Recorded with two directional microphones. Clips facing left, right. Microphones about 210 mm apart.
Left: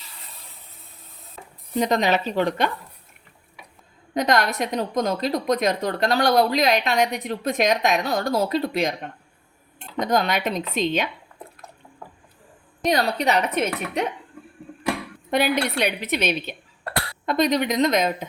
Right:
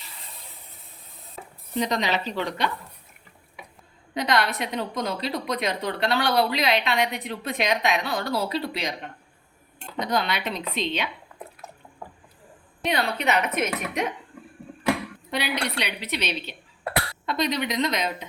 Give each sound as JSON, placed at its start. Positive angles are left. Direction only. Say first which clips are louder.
{"t": 1.8, "sound": "a woman's voice", "louder": "left 5 dB", "side_deg": 50}
{"t": 4.1, "sound": "a woman's voice", "louder": "left 3 dB", "side_deg": 45}
{"t": 10.0, "sound": "a woman's voice", "louder": "left 4 dB", "side_deg": 45}
{"t": 12.8, "sound": "a woman's voice", "louder": "left 4 dB", "side_deg": 40}
{"t": 15.3, "sound": "a woman's voice", "louder": "left 7 dB", "side_deg": 50}